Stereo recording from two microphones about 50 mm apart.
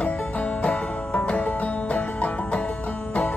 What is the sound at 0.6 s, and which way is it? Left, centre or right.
Music, left.